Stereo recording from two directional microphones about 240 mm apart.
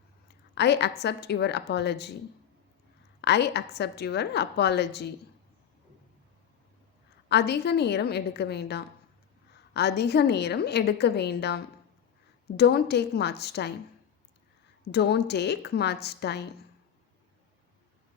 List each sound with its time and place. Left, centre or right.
0.5 s a woman's voice: left
3.2 s a woman's voice: left
7.3 s a woman's voice: left
14.9 s a woman's voice: left